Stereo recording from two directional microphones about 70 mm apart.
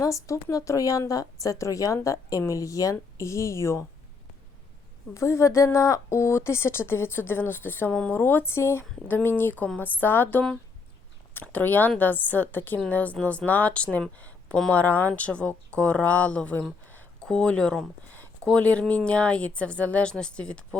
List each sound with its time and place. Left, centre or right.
0.0 s a woman's voice: left
5.1 s speech: left
7.9 s speech: centre
8.1 s speech: left
14.2 s a sound: left
14.7 s speech: left